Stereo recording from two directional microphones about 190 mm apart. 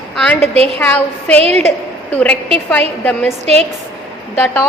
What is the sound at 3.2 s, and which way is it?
Speech, 35° right (ahead or behind).